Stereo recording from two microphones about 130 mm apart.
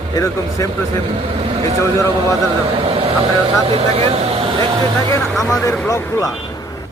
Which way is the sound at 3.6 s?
50° right (ahead or behind).